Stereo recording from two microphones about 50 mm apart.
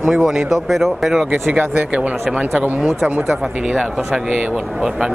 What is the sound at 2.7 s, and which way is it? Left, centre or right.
Speech, right.